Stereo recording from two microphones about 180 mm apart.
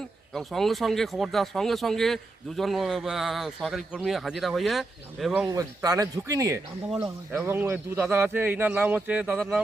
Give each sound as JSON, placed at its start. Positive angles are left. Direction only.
{"t": 0.3, "sound": "speech", "side_deg": 0}
{"t": 5.5, "sound": "a man's voice", "side_deg": -20}